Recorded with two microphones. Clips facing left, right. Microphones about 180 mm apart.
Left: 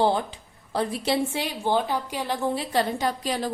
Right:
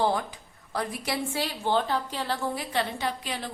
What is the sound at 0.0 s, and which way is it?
A woman's voice, 25° left (ahead or behind).